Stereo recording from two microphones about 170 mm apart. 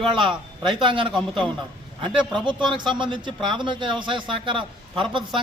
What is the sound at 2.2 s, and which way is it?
Speech, 30° right (ahead or behind).